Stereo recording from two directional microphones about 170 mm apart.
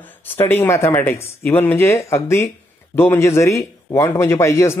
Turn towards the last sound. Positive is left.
turn(degrees=15)  # may be behind; listen again after turning